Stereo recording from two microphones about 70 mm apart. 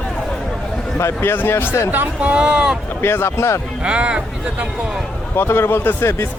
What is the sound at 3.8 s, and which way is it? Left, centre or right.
Speech, centre.